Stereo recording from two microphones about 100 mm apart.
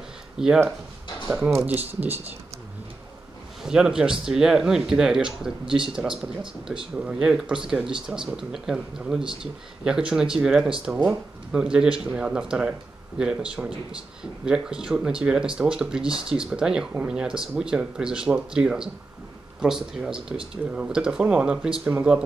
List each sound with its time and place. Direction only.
0.4 s speech: 5° right (ahead or behind)
1.5 s speech: 25° right (ahead or behind)
3.6 s speech: 5° right (ahead or behind)
9.2 s speech: 60° right (ahead or behind)
9.8 s speech: 5° right (ahead or behind)